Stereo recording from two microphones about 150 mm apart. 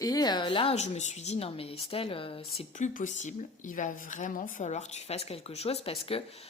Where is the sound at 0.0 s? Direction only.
25° left (ahead or behind).